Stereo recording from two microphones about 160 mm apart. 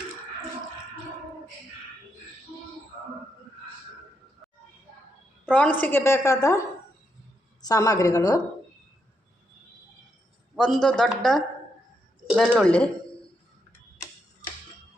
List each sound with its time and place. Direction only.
5.5 s a woman's voice: 10° left (ahead or behind)
7.6 s a woman's voice: 20° left (ahead or behind)
10.5 s speech: centre (ahead or behind)